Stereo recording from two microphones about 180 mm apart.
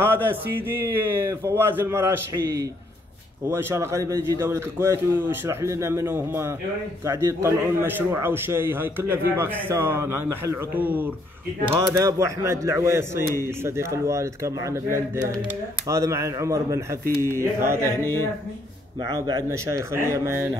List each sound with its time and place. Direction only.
0.0 s a man's voice: 10° right (ahead or behind)
18.0 s speech: 15° left (ahead or behind)
19.0 s a man's voice: 20° right (ahead or behind)